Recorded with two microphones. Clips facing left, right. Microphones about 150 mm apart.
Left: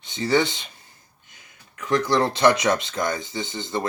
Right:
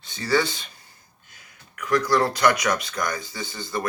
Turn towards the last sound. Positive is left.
turn(degrees=25)  # may be behind; listen again after turning